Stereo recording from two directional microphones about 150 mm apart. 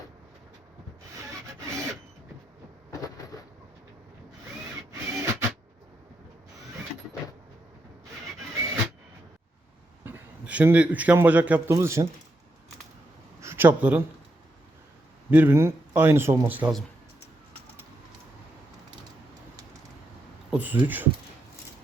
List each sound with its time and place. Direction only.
1.1 s wood: 20° right (ahead or behind)
5.1 s filing: 20° right (ahead or behind)
10.0 s a man's voice: 10° right (ahead or behind)
13.4 s a sound: 15° right (ahead or behind)
15.3 s speech: 15° right (ahead or behind)
20.5 s speech: 10° right (ahead or behind)